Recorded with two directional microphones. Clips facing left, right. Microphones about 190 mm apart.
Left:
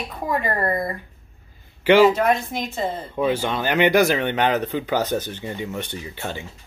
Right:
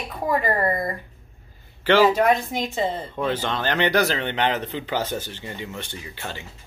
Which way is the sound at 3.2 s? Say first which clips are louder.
Left 4 dB; 10° left (ahead or behind).